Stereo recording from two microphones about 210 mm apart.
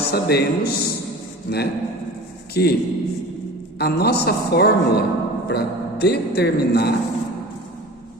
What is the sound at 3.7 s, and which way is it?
A man's voice, 50° left (ahead or behind).